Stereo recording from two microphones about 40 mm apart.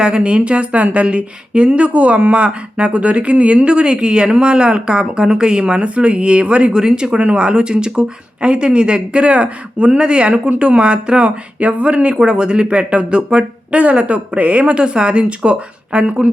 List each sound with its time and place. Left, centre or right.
0.0 s speech: right
6.7 s speech: centre
12.1 s speech: centre